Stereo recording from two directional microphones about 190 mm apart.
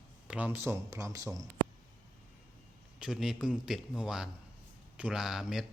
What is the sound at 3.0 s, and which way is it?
A man's voice, centre (ahead or behind).